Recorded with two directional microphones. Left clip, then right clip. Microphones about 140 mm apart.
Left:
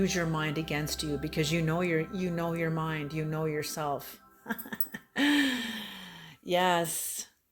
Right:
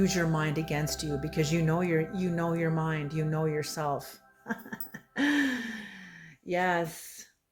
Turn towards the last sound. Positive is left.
turn(degrees=40)  # may be behind; listen again after turning